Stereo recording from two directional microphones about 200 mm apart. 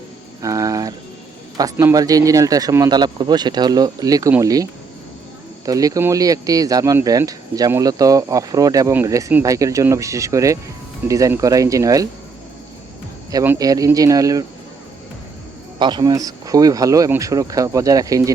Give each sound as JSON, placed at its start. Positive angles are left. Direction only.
{"t": 0.4, "sound": "a sound", "side_deg": -15}
{"t": 1.5, "sound": "speech", "side_deg": -15}
{"t": 13.3, "sound": "speech", "side_deg": -15}
{"t": 15.8, "sound": "speech", "side_deg": -20}